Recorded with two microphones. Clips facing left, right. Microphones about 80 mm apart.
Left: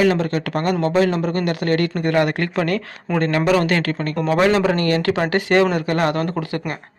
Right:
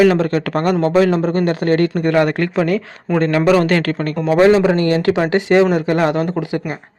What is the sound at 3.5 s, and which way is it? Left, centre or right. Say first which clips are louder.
Speech: right 4 dB; right.